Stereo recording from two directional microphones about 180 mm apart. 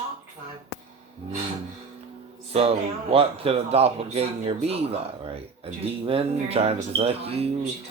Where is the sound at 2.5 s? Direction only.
35° right (ahead or behind).